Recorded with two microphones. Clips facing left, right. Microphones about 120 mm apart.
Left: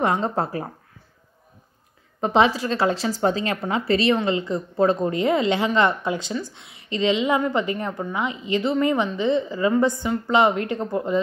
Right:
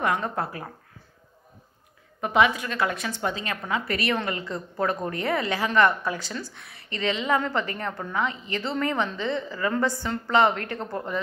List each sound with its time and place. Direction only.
0.0 s speech: 30° left (ahead or behind)
2.1 s a woman's voice: 30° left (ahead or behind)